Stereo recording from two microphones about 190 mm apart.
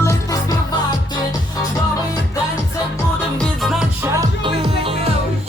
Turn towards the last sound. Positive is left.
turn(degrees=-25)  # may be behind; listen again after turning